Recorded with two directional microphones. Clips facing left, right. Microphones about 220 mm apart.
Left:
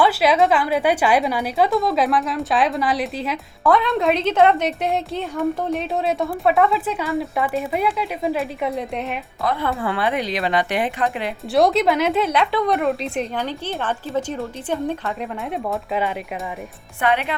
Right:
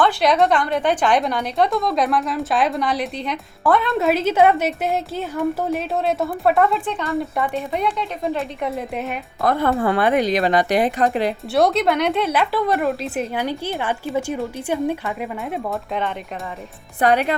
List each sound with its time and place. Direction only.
0.0 s a woman's voice: 5° left (ahead or behind)
9.4 s speech: 50° right (ahead or behind)
11.5 s a woman's voice: centre (ahead or behind)
17.0 s speech: 40° right (ahead or behind)